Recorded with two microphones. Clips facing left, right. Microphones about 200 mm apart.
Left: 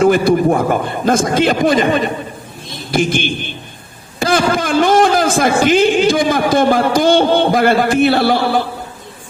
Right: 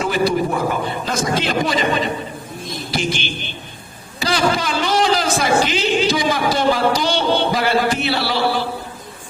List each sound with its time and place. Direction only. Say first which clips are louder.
0.0 s a man's voice: left 7 dB; 50° left (ahead or behind)